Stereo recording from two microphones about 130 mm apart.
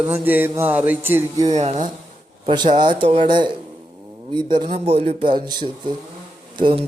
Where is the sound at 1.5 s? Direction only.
55° right (ahead or behind).